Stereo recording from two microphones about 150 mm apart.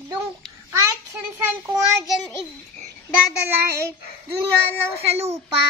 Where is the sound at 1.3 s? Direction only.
20° right (ahead or behind).